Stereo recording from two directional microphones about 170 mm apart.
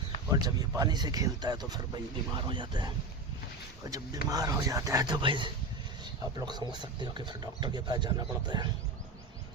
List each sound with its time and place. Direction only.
0.3 s speech: 25° right (ahead or behind)